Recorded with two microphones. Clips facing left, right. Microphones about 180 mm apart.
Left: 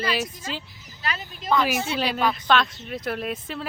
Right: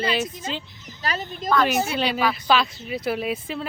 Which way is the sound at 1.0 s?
40° right (ahead or behind).